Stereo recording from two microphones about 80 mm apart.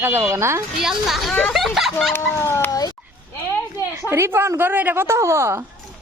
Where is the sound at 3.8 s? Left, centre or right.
Left.